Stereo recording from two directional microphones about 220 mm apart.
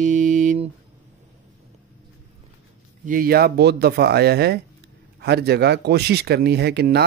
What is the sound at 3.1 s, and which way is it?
Speech, 40° right (ahead or behind).